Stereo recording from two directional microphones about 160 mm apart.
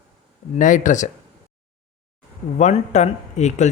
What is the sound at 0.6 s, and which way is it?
Speech, 55° left (ahead or behind).